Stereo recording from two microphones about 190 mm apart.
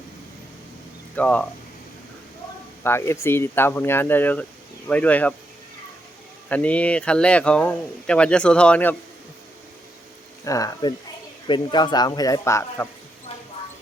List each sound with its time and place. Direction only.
1.1 s speech: 5° left (ahead or behind)
2.8 s speech: 10° left (ahead or behind)
6.5 s speech: 5° left (ahead or behind)
10.4 s speech: 15° left (ahead or behind)